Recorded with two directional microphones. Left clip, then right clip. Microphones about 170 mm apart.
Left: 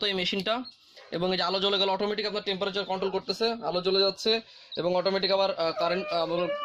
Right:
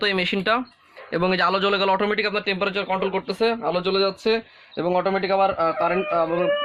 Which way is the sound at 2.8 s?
35° left (ahead or behind).